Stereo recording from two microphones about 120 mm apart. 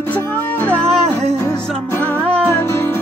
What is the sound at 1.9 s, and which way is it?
Music, 15° left (ahead or behind).